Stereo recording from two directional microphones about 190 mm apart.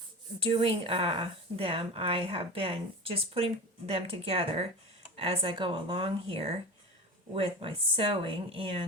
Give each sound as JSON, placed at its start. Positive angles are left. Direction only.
{"t": 0.4, "sound": "speech", "side_deg": -30}